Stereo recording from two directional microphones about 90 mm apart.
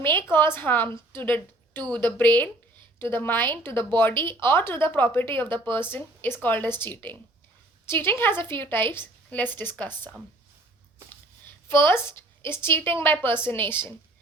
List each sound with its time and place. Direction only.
0.1 s a woman's voice: 25° left (ahead or behind)
11.7 s speech: 30° left (ahead or behind)